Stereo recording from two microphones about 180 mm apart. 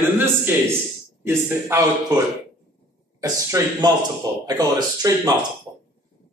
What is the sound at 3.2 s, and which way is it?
Speech, 20° right (ahead or behind).